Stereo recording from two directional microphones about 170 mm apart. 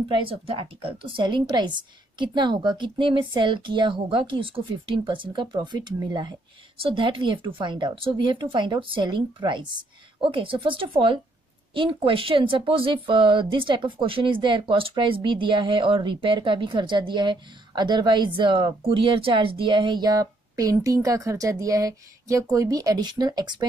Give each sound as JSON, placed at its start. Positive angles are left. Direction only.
{"t": 0.1, "sound": "speech", "side_deg": -30}